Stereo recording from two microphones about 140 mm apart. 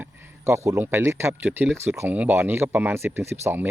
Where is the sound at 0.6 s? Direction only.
20° right (ahead or behind).